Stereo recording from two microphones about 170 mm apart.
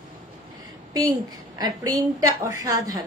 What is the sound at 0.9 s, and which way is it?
A woman's voice, 25° right (ahead or behind).